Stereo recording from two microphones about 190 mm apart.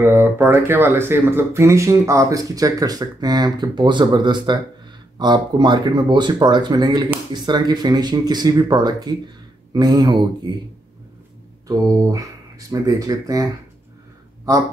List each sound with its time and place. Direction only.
0.0 s speech: 10° right (ahead or behind)
11.6 s speech: 20° right (ahead or behind)